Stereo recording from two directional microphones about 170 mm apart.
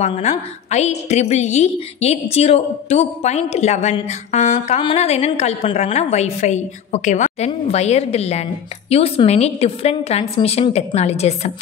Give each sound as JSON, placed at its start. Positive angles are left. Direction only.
{"t": 0.0, "sound": "mantra", "side_deg": 40}